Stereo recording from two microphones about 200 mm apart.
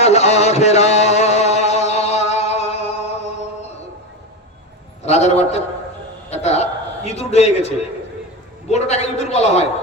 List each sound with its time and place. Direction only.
0.0 s music: 35° left (ahead or behind)
5.0 s a sound: 35° left (ahead or behind)
8.7 s a man's voice: 35° left (ahead or behind)